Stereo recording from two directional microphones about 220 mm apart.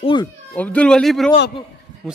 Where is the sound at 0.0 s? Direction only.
20° left (ahead or behind).